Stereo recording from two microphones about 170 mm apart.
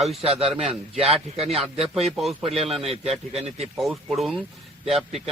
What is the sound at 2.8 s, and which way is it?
Speech, 35° right (ahead or behind).